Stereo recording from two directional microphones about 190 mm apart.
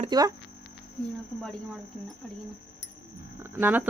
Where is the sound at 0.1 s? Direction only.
20° right (ahead or behind).